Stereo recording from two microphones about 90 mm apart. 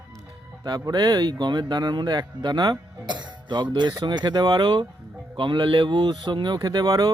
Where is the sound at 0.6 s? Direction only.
50° right (ahead or behind).